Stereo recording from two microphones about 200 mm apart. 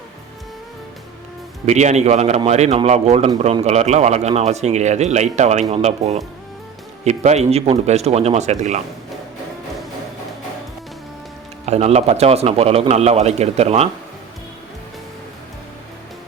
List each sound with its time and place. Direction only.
1.6 s a man's voice: 35° right (ahead or behind)
11.6 s a man's voice: 30° right (ahead or behind)